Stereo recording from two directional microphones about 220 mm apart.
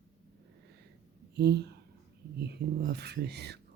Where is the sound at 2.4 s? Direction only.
50° right (ahead or behind).